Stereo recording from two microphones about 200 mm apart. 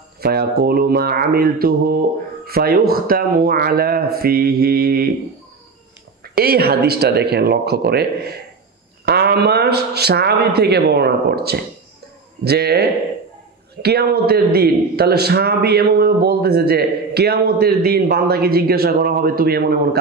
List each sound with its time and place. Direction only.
0.2 s a man's voice: 50° right (ahead or behind)
6.3 s a man's voice: 50° right (ahead or behind)
13.8 s a man's voice: 50° right (ahead or behind)